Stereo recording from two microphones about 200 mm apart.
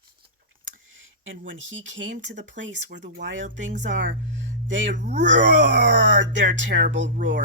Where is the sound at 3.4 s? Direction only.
40° right (ahead or behind).